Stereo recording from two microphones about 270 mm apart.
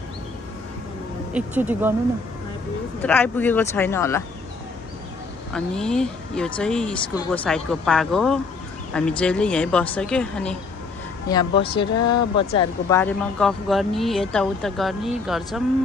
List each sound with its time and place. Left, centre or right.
1.3 s speech: centre
3.0 s speech: centre
5.5 s speech: centre
11.2 s speech: centre